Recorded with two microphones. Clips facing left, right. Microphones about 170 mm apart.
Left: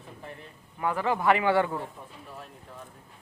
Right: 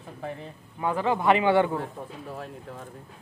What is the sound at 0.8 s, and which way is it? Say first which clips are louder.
Speech: right 2 dB; 20° right (ahead or behind).